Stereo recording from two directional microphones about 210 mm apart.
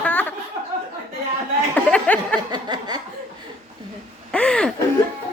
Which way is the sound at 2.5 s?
20° right (ahead or behind).